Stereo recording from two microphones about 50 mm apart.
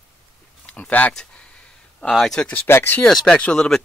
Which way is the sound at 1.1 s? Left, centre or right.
Left.